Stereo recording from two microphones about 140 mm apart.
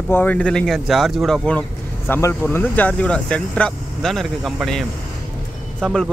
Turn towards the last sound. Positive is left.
turn(degrees=5)  # may be behind; listen again after turning